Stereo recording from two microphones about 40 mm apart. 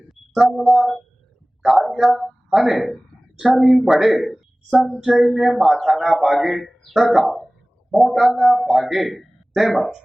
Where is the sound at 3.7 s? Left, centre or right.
Centre.